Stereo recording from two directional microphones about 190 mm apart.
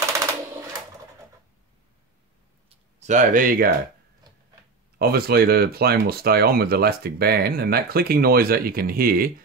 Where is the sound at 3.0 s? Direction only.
40° right (ahead or behind).